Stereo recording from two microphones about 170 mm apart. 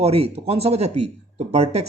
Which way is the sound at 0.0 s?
35° right (ahead or behind).